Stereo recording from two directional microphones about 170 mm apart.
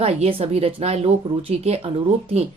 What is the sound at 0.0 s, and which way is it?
A woman's voice, 35° right (ahead or behind).